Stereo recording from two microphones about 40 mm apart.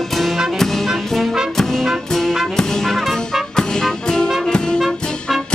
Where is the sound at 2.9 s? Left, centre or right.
Centre.